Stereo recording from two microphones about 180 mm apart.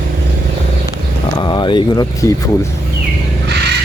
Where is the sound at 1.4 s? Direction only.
25° left (ahead or behind).